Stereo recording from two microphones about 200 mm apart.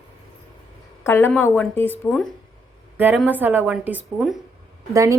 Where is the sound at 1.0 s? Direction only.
10° left (ahead or behind).